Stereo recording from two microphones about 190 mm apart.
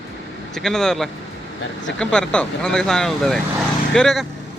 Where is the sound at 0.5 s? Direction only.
5° left (ahead or behind).